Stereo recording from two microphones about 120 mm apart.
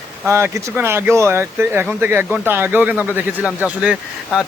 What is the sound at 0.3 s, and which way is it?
Speech, 20° right (ahead or behind).